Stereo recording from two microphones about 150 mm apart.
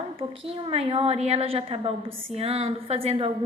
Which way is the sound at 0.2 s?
40° right (ahead or behind).